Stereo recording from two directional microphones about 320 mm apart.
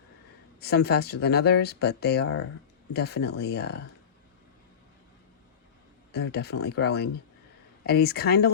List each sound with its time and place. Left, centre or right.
0.6 s speech: left
6.1 s speech: left